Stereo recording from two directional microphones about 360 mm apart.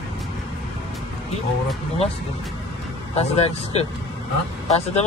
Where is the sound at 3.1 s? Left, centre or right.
Centre.